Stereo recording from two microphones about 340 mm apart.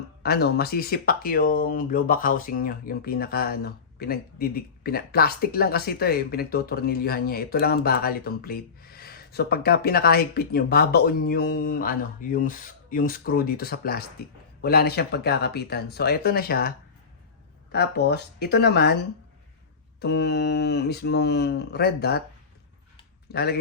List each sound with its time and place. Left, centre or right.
0.2 s speech: left
20.0 s speech: left
23.3 s speech: left